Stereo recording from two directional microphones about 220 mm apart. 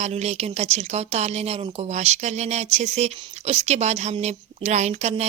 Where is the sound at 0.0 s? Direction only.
30° right (ahead or behind).